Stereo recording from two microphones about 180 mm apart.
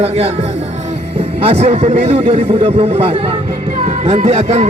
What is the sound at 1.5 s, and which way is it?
A man's voice, 40° right (ahead or behind).